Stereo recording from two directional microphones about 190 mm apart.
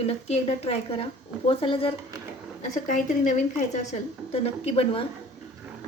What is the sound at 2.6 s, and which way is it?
A woman's voice, 40° left (ahead or behind).